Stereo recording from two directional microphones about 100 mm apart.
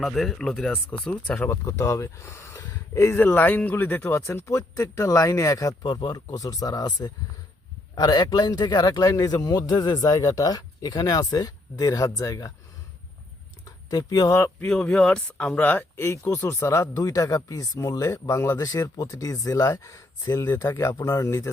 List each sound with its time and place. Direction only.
0.0 s speech: centre (ahead or behind)
1.4 s a man's voice: 30° left (ahead or behind)
13.7 s speech: 40° left (ahead or behind)
14.7 s a man's voice: 5° left (ahead or behind); by 20.4 s 40° left (ahead or behind)
20.4 s speech: 25° left (ahead or behind)